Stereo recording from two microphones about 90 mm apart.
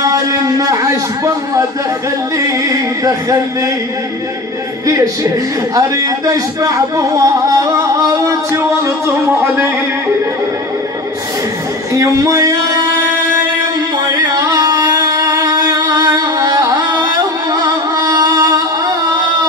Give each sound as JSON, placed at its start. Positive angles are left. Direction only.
{"t": 0.1, "sound": "speech", "side_deg": -40}
{"t": 4.8, "sound": "speech", "side_deg": -35}
{"t": 11.9, "sound": "speech", "side_deg": -35}
{"t": 13.9, "sound": "music", "side_deg": -45}